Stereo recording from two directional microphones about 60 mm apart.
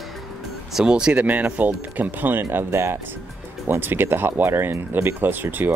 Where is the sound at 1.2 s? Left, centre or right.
Right.